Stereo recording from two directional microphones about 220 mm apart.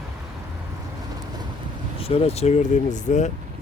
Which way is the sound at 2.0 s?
25° left (ahead or behind).